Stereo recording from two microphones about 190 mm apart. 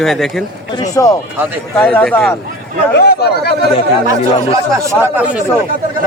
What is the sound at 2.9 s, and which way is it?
Speech, 60° left (ahead or behind).